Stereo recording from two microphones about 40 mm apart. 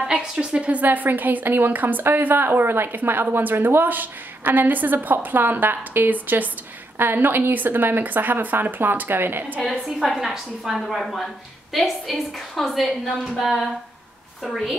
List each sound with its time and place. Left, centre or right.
0.1 s a woman's voice: right
0.8 s a woman's voice: right
3.3 s a woman's voice: right
3.8 s a woman's voice: right
7.0 s a woman's voice: right
10.0 s a woman's voice: centre